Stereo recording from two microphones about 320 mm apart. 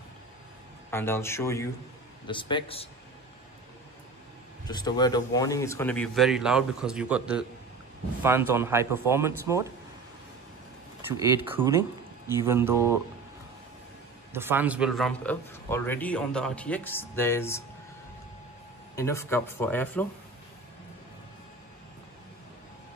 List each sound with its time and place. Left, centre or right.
0.8 s speech: centre
4.6 s a man's voice: centre
11.1 s speech: centre
14.3 s a man's voice: centre
18.9 s speech: centre